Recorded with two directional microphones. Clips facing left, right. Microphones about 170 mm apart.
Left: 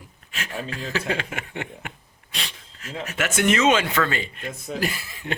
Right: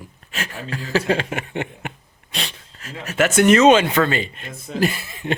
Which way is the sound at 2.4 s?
40° right (ahead or behind).